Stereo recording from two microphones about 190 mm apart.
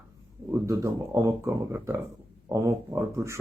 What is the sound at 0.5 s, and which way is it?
Speech, 15° right (ahead or behind).